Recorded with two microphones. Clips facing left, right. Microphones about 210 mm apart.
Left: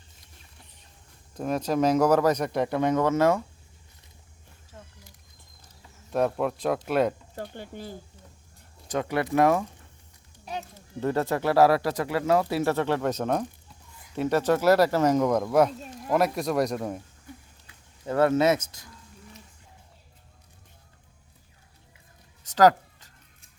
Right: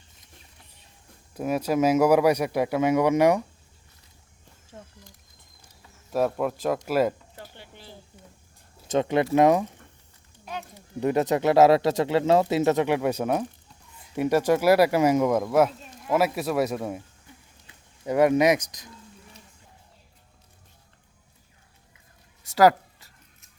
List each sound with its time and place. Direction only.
1.4 s speech: 10° right (ahead or behind)
4.7 s a sound: 25° right (ahead or behind)
5.6 s a sound: 5° right (ahead or behind)
6.8 s speech: 5° right (ahead or behind)
7.3 s speech: 45° left (ahead or behind)
8.9 s speech: 20° right (ahead or behind)
10.8 s speech: 15° right (ahead or behind)
18.0 s speech: 15° right (ahead or behind)
22.4 s a sound: 10° right (ahead or behind)